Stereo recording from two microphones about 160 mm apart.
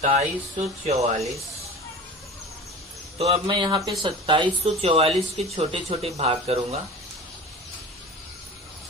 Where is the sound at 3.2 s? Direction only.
40° right (ahead or behind).